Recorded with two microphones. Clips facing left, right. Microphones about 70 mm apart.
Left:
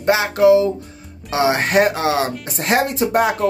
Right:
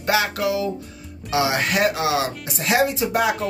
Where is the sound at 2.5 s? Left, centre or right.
Left.